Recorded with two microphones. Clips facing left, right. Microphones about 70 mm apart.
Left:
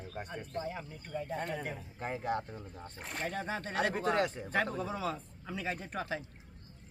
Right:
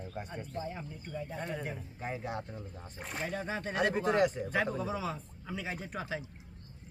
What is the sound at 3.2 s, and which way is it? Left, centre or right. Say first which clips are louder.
Speech: even; left.